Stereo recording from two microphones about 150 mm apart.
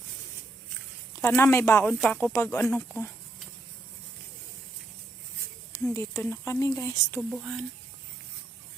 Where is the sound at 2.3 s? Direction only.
15° left (ahead or behind).